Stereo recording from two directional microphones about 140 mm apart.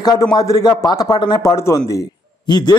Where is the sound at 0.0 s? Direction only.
30° left (ahead or behind).